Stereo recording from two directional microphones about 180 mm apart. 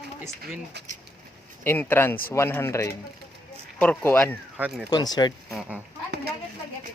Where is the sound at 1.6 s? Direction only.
10° left (ahead or behind).